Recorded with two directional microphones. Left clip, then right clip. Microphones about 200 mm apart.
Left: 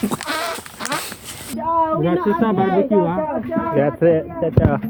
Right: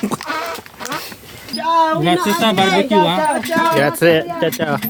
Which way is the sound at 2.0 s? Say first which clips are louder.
Right 3 dB; 65° right (ahead or behind).